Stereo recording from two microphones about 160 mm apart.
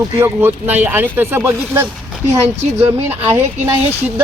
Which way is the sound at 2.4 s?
40° right (ahead or behind).